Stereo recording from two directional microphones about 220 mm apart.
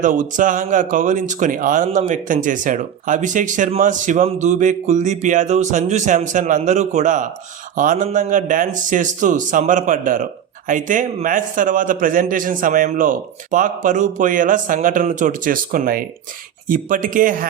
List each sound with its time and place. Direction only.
0.0 s speech: 35° right (ahead or behind)